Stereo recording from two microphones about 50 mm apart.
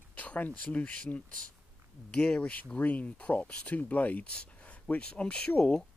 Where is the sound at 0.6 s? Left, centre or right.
Left.